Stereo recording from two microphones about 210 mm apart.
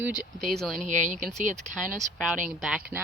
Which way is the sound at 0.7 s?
35° right (ahead or behind).